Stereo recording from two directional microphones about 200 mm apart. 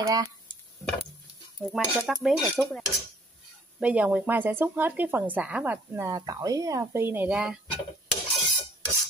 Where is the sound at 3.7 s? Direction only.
5° right (ahead or behind).